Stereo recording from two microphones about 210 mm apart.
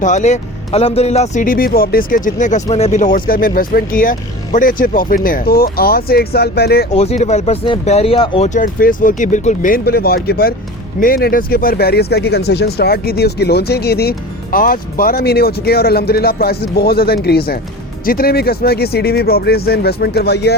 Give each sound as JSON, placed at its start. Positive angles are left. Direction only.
{"t": 0.0, "sound": "speech", "side_deg": 35}
{"t": 6.9, "sound": "speech", "side_deg": 30}